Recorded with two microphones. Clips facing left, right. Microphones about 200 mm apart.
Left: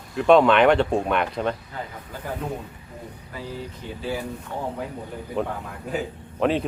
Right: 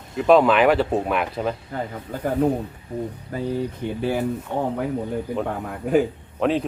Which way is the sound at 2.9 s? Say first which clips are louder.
Right 13 dB; 35° right (ahead or behind).